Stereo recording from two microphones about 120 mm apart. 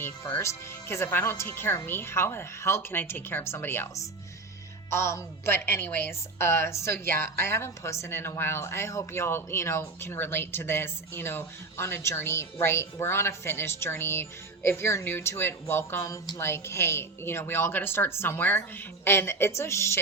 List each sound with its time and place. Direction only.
0.0 s a woman's voice: 20° left (ahead or behind)